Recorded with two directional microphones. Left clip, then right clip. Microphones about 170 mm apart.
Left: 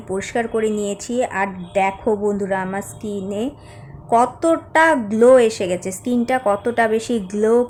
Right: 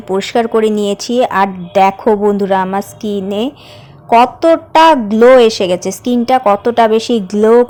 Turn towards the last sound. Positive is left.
turn(degrees=-25)  # may be behind; listen again after turning